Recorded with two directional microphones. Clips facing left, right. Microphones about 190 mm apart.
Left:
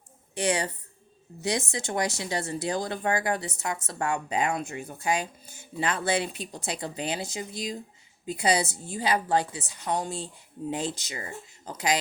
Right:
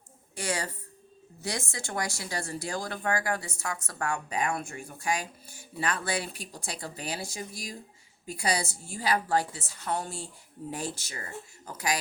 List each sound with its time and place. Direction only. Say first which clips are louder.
0.3 s speech: left 6 dB; 20° left (ahead or behind)